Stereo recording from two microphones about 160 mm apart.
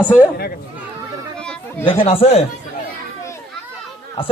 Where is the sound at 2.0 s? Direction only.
40° left (ahead or behind).